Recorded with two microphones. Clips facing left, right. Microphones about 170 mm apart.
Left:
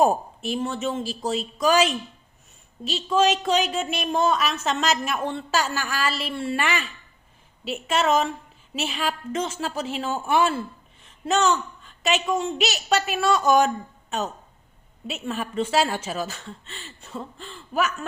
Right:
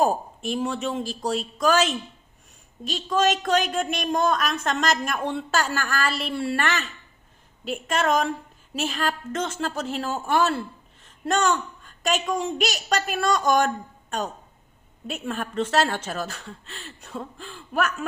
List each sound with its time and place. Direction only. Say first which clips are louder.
0.4 s speech: even; centre (ahead or behind)
2.9 s speech: left 2 dB; 10° left (ahead or behind)
7.7 s speech: left 1 dB; 5° left (ahead or behind)
15.1 s speech: even; centre (ahead or behind)